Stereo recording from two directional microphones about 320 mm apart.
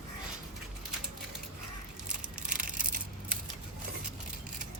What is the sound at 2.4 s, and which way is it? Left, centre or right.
Crushing, right.